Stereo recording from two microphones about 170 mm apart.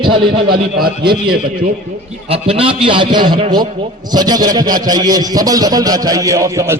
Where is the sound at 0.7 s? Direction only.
65° right (ahead or behind).